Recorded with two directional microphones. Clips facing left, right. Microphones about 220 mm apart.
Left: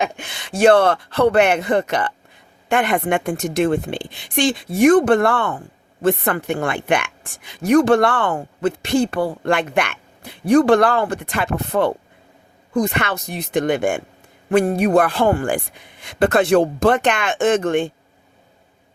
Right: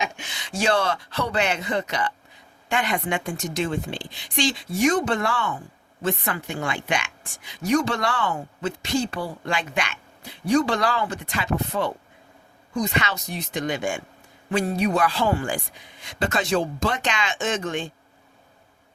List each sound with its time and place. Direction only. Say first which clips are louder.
0.0 s a woman's voice: left 7 dB; 55° left (ahead or behind)